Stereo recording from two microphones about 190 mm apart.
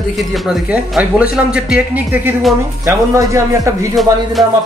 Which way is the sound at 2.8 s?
15° right (ahead or behind).